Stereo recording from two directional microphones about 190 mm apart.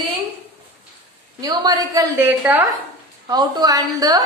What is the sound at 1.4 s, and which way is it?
A woman's voice, 20° right (ahead or behind).